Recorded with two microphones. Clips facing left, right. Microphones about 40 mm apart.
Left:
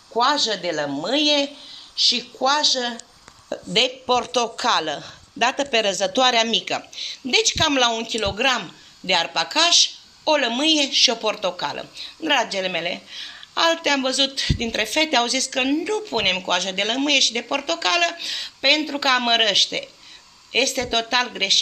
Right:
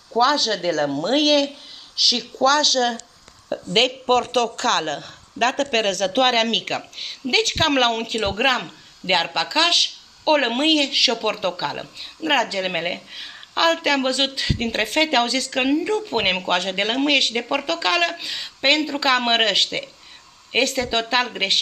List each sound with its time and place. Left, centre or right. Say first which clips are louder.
0.2 s speech: right 1 dB; left
2.4 s a woman's voice: right 3 dB; centre
3.7 s speech: right 2 dB; centre
4.6 s speech: even; centre